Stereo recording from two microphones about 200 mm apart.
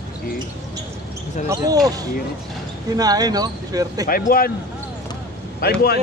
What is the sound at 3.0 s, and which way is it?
Speech, 20° right (ahead or behind).